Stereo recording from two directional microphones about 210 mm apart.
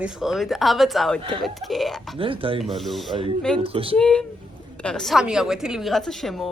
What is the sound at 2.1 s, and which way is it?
Speech, 25° right (ahead or behind).